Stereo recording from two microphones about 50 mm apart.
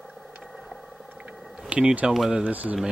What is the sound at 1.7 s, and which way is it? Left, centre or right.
Speech, right.